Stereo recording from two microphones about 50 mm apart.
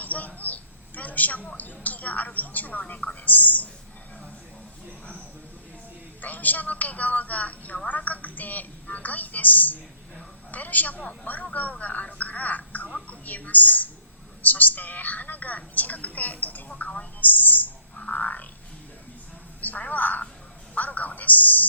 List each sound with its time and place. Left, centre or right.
0.0 s a sound: left
1.5 s a woman's voice: left
3.2 s whispering: left
6.2 s a woman's voice: left
17.9 s frog: left
19.6 s telephone: left
20.7 s a sound: left